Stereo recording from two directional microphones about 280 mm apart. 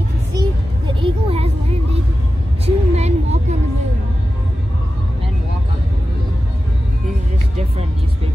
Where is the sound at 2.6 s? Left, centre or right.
Right.